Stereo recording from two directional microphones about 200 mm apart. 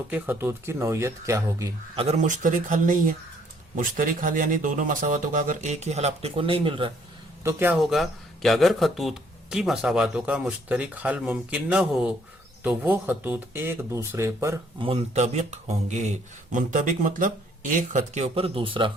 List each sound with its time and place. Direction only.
0.1 s speech: 10° right (ahead or behind)
2.0 s speech: 35° right (ahead or behind)
7.4 s speech: 10° right (ahead or behind)
14.8 s speech: 30° right (ahead or behind)